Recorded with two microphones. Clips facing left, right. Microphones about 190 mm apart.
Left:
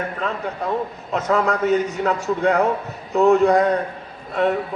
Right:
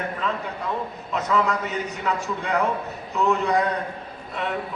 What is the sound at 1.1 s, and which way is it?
A man's voice, 45° left (ahead or behind).